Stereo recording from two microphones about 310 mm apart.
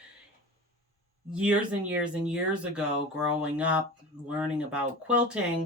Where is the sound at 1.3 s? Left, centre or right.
Centre.